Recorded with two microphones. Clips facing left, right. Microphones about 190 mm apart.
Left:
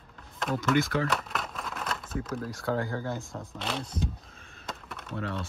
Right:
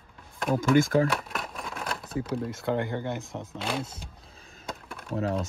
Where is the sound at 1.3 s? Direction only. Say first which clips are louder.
Even; centre (ahead or behind).